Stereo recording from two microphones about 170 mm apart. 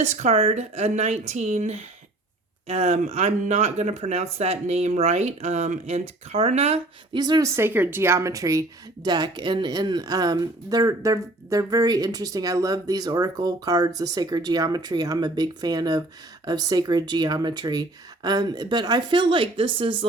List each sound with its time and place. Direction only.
0.0 s speech: 40° right (ahead or behind)
7.2 s a woman's voice: 25° right (ahead or behind)